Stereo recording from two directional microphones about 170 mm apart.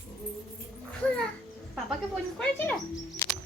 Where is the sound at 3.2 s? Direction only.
15° left (ahead or behind).